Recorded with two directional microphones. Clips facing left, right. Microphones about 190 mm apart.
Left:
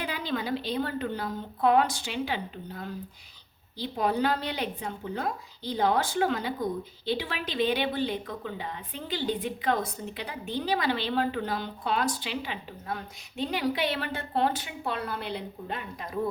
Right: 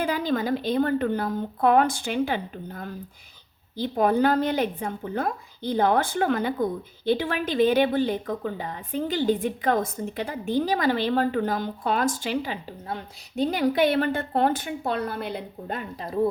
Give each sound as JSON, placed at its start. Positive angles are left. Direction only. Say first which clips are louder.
{"t": 0.0, "sound": "a woman's voice", "louder": "right 7 dB", "side_deg": -45}
{"t": 16.0, "sound": "speech", "louder": "right 6 dB", "side_deg": -30}